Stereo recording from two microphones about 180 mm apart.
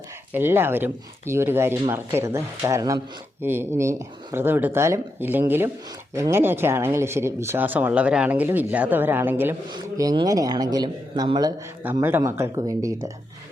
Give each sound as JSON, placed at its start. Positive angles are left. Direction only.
{"t": 0.3, "sound": "speech", "side_deg": -10}
{"t": 9.7, "sound": "speech", "side_deg": -20}
{"t": 11.8, "sound": "speech", "side_deg": -10}